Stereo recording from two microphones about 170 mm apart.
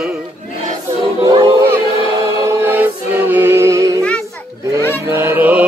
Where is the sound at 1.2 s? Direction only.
25° right (ahead or behind).